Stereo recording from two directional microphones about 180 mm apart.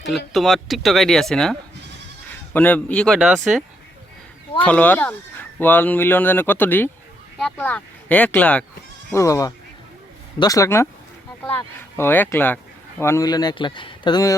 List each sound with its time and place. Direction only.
0.3 s speech: centre (ahead or behind)
4.6 s a man's voice: 10° left (ahead or behind)